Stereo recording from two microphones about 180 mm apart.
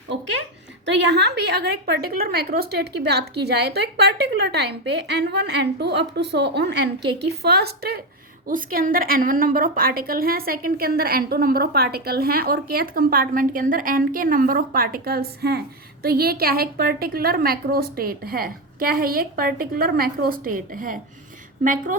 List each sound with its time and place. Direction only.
0.9 s a woman's voice: 70° right (ahead or behind); by 21.9 s 50° right (ahead or behind)